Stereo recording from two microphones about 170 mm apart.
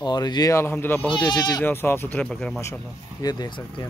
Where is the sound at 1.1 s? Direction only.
20° left (ahead or behind); by 2.6 s centre (ahead or behind).